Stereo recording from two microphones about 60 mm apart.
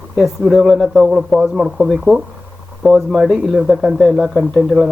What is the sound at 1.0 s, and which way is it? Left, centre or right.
Speech, centre.